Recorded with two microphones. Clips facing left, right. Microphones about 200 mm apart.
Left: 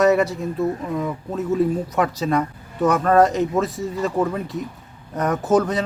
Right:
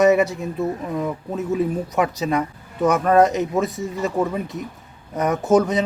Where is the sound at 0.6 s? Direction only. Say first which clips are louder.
Left 1 dB; centre (ahead or behind).